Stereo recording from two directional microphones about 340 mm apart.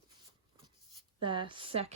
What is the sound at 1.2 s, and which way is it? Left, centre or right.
Speech, centre.